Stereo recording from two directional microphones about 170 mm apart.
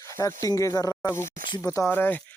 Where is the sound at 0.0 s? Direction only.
15° left (ahead or behind).